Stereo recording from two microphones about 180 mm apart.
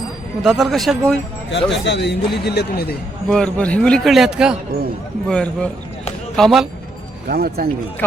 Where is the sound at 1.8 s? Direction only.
75° left (ahead or behind).